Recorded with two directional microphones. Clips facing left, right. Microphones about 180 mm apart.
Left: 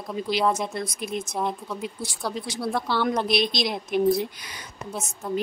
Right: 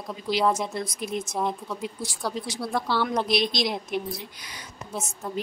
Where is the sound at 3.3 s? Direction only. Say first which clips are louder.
Left 1 dB; 60° left (ahead or behind).